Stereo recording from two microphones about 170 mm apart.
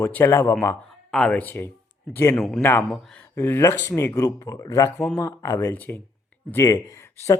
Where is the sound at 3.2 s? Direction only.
15° left (ahead or behind).